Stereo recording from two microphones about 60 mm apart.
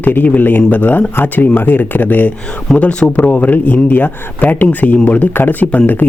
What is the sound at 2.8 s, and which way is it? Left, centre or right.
Speech, centre.